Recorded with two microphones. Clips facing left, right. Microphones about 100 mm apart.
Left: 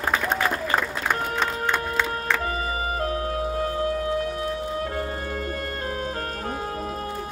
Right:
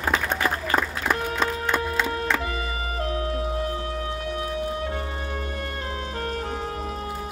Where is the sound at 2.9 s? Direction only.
40° left (ahead or behind).